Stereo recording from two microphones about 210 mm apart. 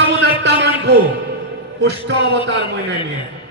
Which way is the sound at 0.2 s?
55° right (ahead or behind).